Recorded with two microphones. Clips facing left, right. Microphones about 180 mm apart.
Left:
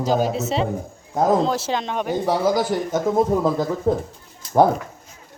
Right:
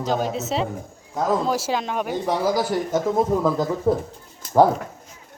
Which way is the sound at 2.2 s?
30° left (ahead or behind).